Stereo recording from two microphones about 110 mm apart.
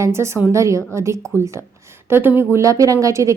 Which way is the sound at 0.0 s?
25° right (ahead or behind).